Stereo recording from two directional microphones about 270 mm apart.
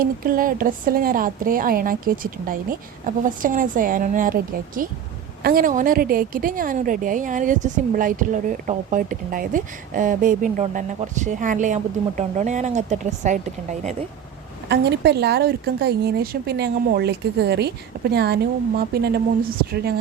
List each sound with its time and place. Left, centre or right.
0.0 s a woman's voice: right
14.7 s speech: right